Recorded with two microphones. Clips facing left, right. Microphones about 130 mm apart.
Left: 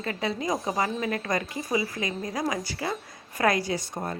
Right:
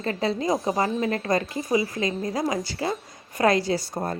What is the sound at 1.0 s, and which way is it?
Speech, 30° right (ahead or behind).